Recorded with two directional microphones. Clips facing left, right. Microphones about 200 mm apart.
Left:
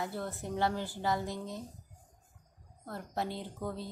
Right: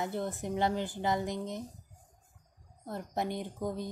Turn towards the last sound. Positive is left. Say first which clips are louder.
# right 3 dB
turn(degrees=-15)  # may be behind; listen again after turning